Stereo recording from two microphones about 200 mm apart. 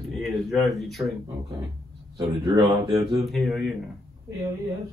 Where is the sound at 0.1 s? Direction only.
Centre (ahead or behind).